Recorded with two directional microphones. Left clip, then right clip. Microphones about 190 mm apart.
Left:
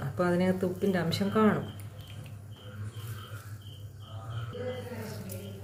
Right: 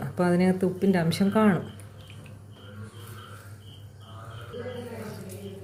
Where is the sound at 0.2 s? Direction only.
20° right (ahead or behind).